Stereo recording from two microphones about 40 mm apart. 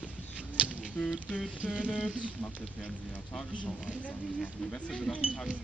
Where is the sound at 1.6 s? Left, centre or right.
Right.